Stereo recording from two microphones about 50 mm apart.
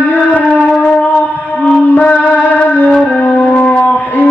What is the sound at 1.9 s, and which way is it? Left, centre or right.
Music, left.